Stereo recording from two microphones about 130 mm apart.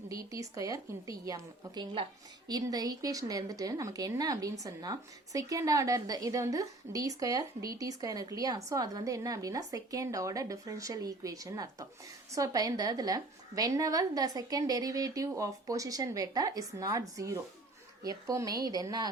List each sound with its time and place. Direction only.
0.1 s a woman's voice: 25° right (ahead or behind)